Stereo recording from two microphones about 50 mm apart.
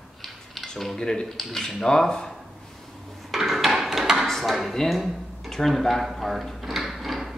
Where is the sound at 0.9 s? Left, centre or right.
Centre.